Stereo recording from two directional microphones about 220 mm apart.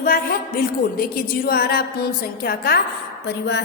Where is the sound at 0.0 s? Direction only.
40° left (ahead or behind).